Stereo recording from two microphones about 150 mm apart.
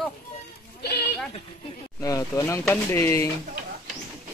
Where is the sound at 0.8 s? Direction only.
90° left.